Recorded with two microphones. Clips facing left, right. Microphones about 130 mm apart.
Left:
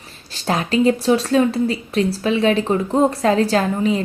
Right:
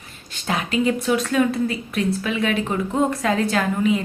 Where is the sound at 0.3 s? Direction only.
35° left (ahead or behind).